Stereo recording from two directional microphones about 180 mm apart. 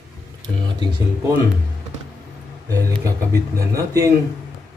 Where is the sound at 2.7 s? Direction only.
20° right (ahead or behind).